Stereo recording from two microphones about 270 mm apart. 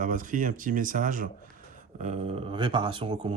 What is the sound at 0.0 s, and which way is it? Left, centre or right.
Speech, right.